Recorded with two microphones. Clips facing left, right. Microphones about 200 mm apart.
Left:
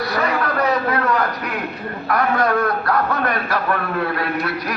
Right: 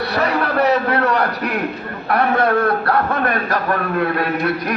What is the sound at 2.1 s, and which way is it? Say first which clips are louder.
Speech: right 2 dB; 30° right (ahead or behind).